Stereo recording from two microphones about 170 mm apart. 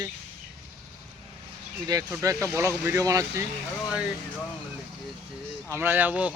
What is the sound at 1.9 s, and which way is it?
Speech, 20° right (ahead or behind).